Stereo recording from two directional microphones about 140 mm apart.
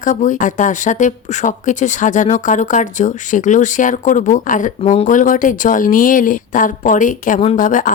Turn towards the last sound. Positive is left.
turn(degrees=65)  # may be behind; listen again after turning